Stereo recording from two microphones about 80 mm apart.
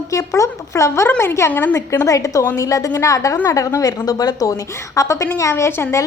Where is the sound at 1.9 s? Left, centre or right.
Left.